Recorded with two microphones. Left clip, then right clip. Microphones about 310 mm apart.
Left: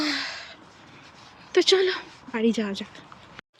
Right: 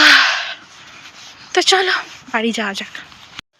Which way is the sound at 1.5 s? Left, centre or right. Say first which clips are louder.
Right 7 dB; centre.